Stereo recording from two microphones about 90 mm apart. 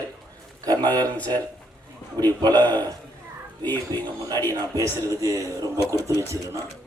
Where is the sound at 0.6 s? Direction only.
50° right (ahead or behind).